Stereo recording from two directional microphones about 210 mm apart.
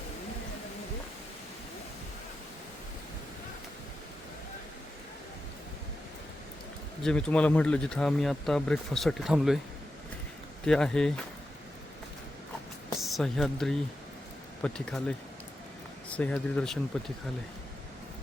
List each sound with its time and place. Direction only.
7.0 s speech: 5° left (ahead or behind)
10.7 s speech: 5° left (ahead or behind)
13.0 s speech: centre (ahead or behind)
16.0 s speech: 5° left (ahead or behind)